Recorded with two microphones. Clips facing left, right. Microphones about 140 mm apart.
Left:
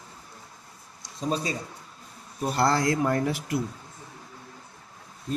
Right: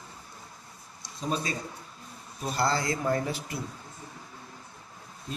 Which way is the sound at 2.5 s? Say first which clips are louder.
Left 4 dB; 65° left (ahead or behind).